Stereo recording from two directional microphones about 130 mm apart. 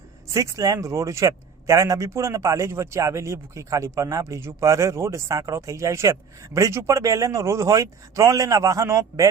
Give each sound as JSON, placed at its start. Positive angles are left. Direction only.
{"t": 0.3, "sound": "speech", "side_deg": -25}